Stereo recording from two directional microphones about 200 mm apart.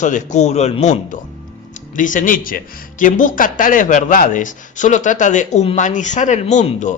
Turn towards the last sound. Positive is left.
turn(degrees=35)  # may be behind; listen again after turning